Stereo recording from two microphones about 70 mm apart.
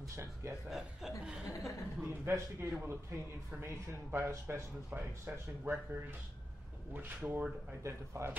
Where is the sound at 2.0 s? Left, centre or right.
Right.